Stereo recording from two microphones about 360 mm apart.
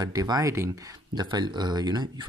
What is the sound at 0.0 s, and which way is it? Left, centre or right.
Speech, centre.